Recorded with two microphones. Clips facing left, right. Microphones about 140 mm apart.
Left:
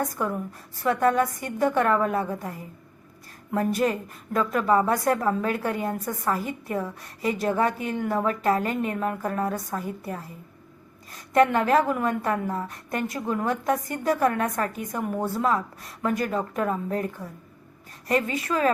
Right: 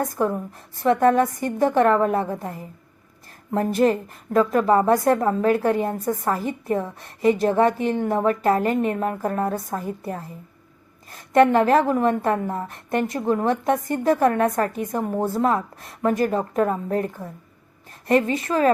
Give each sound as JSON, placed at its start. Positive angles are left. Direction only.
{"t": 0.2, "sound": "a woman's voice", "side_deg": -30}
{"t": 5.7, "sound": "a woman's voice", "side_deg": -25}
{"t": 6.2, "sound": "a woman's voice", "side_deg": -40}
{"t": 6.7, "sound": "a woman's voice", "side_deg": -25}
{"t": 11.3, "sound": "a woman's voice", "side_deg": -30}
{"t": 15.3, "sound": "a woman's voice", "side_deg": -45}
{"t": 15.9, "sound": "a woman's voice", "side_deg": -30}